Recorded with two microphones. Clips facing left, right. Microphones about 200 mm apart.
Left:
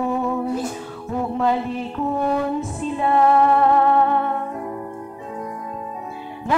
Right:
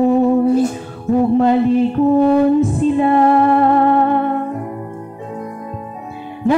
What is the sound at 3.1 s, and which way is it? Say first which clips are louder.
Music: even; 40° right (ahead or behind).